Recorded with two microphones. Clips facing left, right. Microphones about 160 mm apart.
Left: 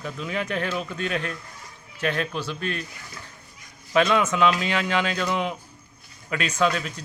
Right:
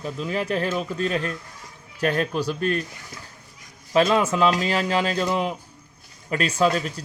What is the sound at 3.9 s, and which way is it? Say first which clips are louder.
Speech: right 2 dB; 35° right (ahead or behind).